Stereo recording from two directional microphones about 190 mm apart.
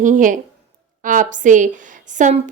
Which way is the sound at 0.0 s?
45° right (ahead or behind).